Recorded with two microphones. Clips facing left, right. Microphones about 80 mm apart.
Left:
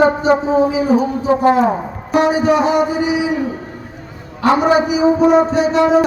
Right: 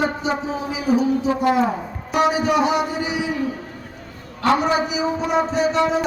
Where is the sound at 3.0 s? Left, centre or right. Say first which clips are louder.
Left 6 dB; centre.